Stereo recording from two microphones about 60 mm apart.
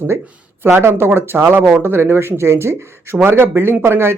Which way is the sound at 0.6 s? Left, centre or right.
Right.